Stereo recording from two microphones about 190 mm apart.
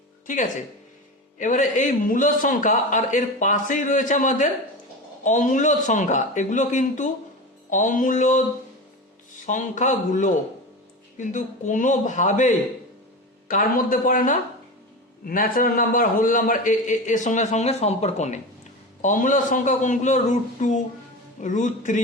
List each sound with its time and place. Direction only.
1.4 s a man's voice: 40° left (ahead or behind)